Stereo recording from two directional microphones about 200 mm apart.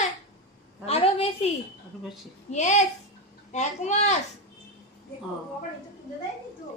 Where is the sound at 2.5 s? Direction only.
35° left (ahead or behind).